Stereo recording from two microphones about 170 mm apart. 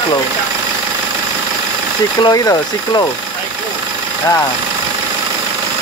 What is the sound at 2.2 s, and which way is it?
Speech, 20° left (ahead or behind).